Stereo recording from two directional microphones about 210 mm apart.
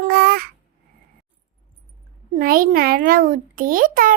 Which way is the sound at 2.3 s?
45° right (ahead or behind).